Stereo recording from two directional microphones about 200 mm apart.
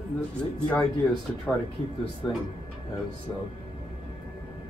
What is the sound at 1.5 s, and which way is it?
Speech, 10° left (ahead or behind).